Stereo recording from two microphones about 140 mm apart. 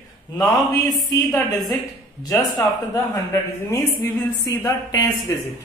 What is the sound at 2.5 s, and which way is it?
Speech, 30° left (ahead or behind).